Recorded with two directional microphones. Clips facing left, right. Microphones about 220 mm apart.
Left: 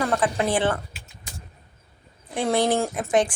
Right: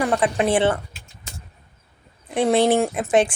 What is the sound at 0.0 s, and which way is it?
Speech, 20° right (ahead or behind).